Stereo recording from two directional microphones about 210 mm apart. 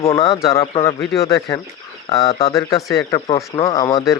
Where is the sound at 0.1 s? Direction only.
15° left (ahead or behind).